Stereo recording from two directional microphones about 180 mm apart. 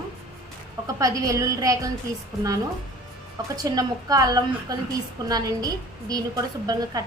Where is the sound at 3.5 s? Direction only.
20° right (ahead or behind).